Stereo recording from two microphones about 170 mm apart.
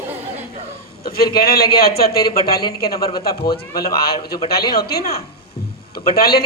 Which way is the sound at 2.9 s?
20° left (ahead or behind).